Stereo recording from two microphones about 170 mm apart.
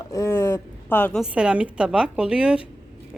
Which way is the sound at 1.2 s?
5° right (ahead or behind).